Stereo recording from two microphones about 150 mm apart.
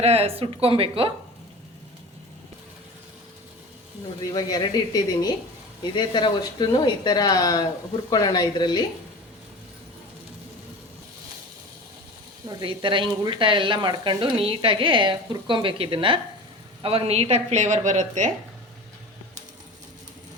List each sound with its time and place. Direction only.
0.0 s speech: 40° right (ahead or behind)
4.2 s speech: 25° left (ahead or behind)
12.5 s a woman's voice: 30° right (ahead or behind); by 18.3 s 55° right (ahead or behind)